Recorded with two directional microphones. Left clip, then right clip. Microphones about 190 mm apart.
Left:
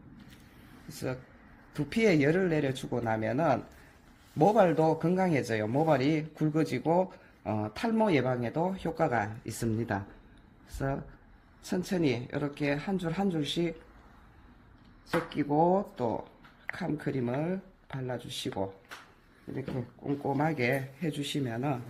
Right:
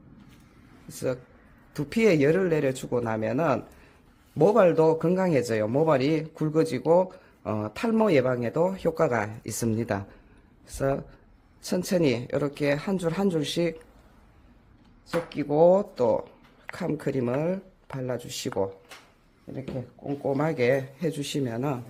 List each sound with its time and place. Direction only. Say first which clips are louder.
0.9 s speech: right 7 dB; 35° right (ahead or behind)
11.6 s speech: right 6 dB; 45° right (ahead or behind)
15.3 s speech: right 8 dB; 30° right (ahead or behind)
20.1 s speech: right 3 dB; 35° right (ahead or behind)